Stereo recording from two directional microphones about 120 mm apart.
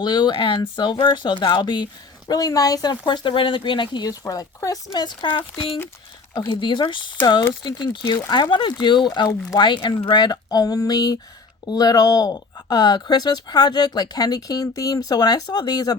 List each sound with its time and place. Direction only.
0.0 s speech: 35° left (ahead or behind)